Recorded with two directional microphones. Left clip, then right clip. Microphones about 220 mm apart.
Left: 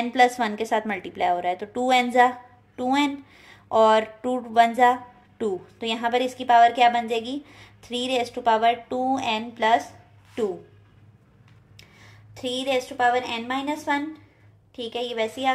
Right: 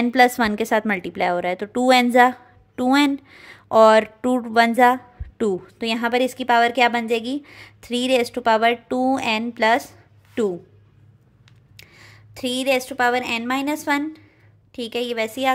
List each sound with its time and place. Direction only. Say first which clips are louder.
0.0 s a woman's voice: right 3 dB; 40° right (ahead or behind)
11.7 s a woman's voice: right 5 dB; 50° right (ahead or behind)